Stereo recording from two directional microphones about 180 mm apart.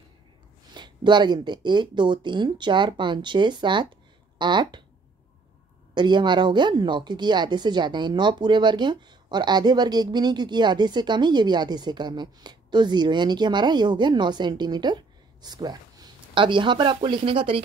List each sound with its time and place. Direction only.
0.7 s a woman's voice: 25° right (ahead or behind)
5.9 s a woman's voice: 25° right (ahead or behind)